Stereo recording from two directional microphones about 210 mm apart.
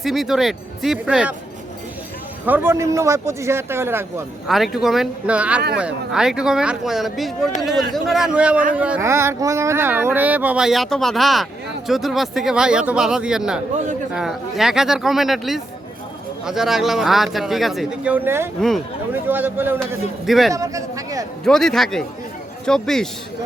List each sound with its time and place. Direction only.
0.0 s a man's voice: centre (ahead or behind)
2.5 s speech: 10° right (ahead or behind)
4.4 s a man's voice: centre (ahead or behind)
20.5 s speech: 15° right (ahead or behind)
21.4 s a man's voice: centre (ahead or behind)